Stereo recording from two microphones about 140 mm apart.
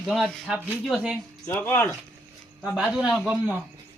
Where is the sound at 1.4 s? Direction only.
15° left (ahead or behind).